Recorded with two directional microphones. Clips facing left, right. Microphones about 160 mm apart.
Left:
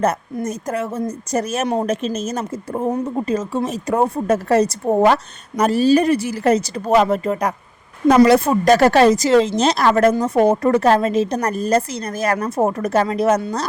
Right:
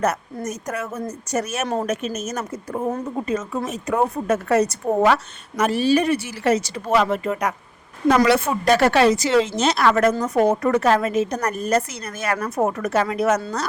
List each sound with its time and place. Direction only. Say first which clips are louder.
0.0 s a woman's voice: left 3 dB; 30° left (ahead or behind)